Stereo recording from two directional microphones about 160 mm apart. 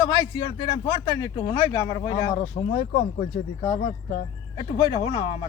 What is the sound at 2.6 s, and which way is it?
Speech, 60° left (ahead or behind).